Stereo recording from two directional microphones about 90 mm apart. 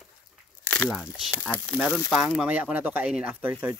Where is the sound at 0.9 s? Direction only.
5° right (ahead or behind); by 3.7 s 20° right (ahead or behind).